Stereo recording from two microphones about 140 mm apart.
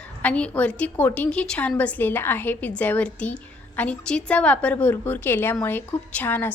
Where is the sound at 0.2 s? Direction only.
10° left (ahead or behind).